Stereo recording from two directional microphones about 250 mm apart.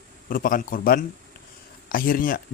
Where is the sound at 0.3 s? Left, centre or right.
Left.